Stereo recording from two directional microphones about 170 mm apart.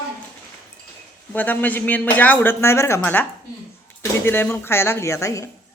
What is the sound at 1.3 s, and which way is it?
Speech, 10° left (ahead or behind).